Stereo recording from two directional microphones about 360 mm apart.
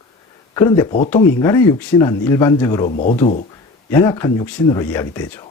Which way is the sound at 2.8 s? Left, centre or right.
Left.